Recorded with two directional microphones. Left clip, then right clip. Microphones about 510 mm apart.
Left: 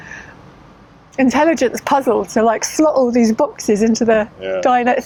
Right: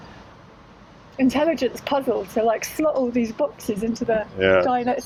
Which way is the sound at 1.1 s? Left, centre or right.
Left.